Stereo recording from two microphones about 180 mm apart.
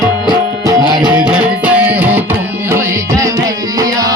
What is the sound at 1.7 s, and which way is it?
Music, 10° right (ahead or behind).